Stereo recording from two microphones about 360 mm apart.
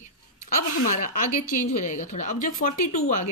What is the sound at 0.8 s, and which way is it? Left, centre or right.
A woman's voice, left.